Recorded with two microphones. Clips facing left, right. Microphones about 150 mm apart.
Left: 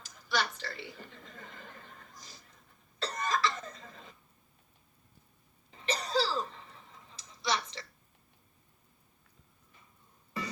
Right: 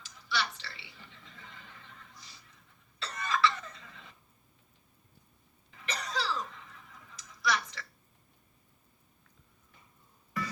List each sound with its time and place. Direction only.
0.0 s a sound: 45° left (ahead or behind)
3.0 s cough: 45° left (ahead or behind)
5.7 s cough: 30° left (ahead or behind)